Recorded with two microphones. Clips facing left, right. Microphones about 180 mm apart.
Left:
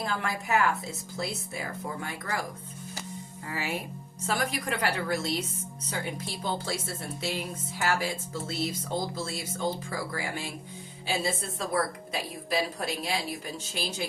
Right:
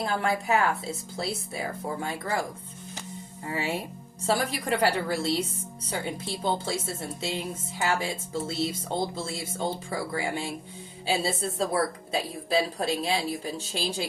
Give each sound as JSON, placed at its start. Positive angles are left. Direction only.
{"t": 0.0, "sound": "speech", "side_deg": -30}
{"t": 3.5, "sound": "a woman's voice", "side_deg": -30}